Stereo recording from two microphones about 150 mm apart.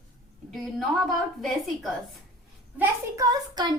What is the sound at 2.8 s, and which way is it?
Speech, 20° right (ahead or behind).